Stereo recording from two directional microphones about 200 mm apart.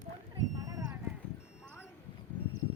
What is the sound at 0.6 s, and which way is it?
Clip-clop, 20° right (ahead or behind).